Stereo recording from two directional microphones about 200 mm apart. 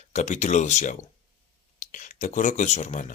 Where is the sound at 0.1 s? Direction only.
35° left (ahead or behind).